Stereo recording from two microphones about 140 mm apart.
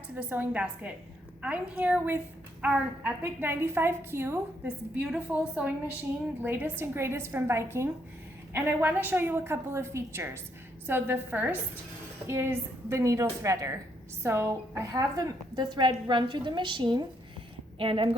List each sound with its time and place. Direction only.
0.1 s a woman's voice: 10° right (ahead or behind); by 18.1 s 40° right (ahead or behind)